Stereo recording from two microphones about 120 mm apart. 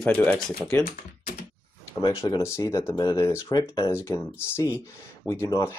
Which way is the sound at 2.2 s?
25° left (ahead or behind).